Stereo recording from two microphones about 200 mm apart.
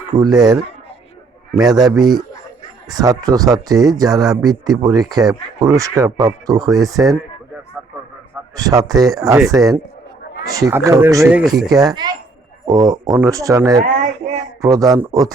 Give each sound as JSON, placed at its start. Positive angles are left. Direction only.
{"t": 0.1, "sound": "speech", "side_deg": -20}
{"t": 8.5, "sound": "speech", "side_deg": -20}
{"t": 11.5, "sound": "speech", "side_deg": -20}
{"t": 13.8, "sound": "speech", "side_deg": -40}
{"t": 14.6, "sound": "speech", "side_deg": -15}